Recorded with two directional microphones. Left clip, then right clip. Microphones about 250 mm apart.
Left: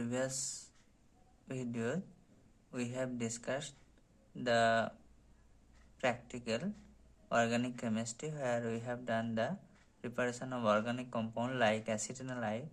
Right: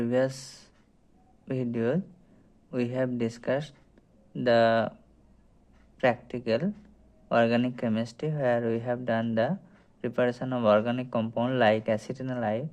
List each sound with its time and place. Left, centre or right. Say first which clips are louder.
0.0 s speech: right 11 dB; right
6.0 s speech: right 10 dB; right